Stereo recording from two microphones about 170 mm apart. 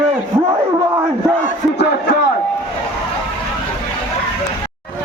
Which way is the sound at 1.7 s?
75° left (ahead or behind).